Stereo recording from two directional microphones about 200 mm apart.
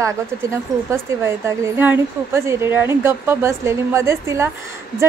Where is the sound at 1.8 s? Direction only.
10° right (ahead or behind).